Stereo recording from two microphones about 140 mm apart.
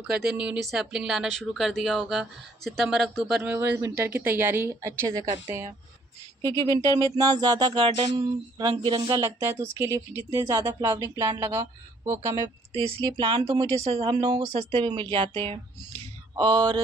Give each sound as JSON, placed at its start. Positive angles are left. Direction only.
{"t": 0.0, "sound": "speech", "side_deg": -5}
{"t": 3.4, "sound": "speech", "side_deg": -10}
{"t": 6.4, "sound": "speech", "side_deg": -30}
{"t": 9.2, "sound": "speech", "side_deg": -20}
{"t": 12.7, "sound": "speech", "side_deg": -45}
{"t": 13.5, "sound": "speech", "side_deg": -25}
{"t": 13.8, "sound": "speech", "side_deg": -45}
{"t": 14.1, "sound": "speech", "side_deg": -30}
{"t": 16.3, "sound": "speech", "side_deg": -30}